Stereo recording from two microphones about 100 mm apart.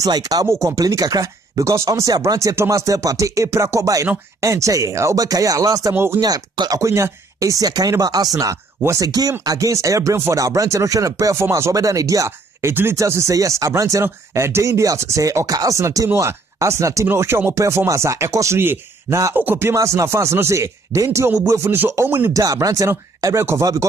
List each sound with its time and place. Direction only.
0.0 s speech: 40° right (ahead or behind)
6.2 s speech: 40° right (ahead or behind)
21.3 s speech: 20° right (ahead or behind)
22.4 s speech: 35° right (ahead or behind)